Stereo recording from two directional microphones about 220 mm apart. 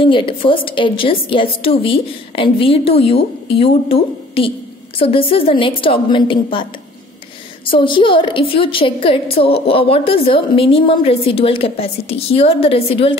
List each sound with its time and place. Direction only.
0.0 s a woman's voice: 25° left (ahead or behind)